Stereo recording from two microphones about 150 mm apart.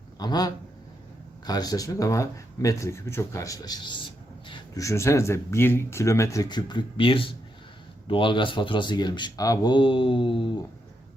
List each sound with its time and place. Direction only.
0.2 s speech: 25° left (ahead or behind)
4.4 s a sound: 30° left (ahead or behind)
4.8 s speech: 20° left (ahead or behind); by 10.5 s 35° left (ahead or behind)